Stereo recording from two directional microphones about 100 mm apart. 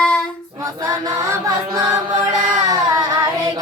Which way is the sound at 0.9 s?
35° right (ahead or behind).